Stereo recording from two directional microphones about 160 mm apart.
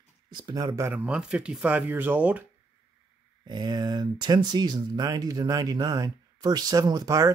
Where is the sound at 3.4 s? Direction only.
25° right (ahead or behind).